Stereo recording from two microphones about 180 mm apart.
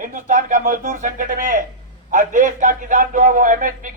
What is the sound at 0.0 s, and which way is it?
A man's voice, 45° right (ahead or behind).